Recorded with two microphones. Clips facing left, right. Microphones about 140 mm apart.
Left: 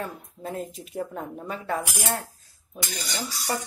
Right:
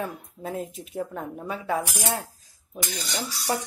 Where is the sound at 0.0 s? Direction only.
5° right (ahead or behind).